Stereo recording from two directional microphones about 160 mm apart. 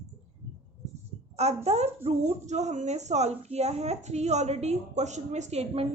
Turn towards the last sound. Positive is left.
turn(degrees=-40)  # may be behind; listen again after turning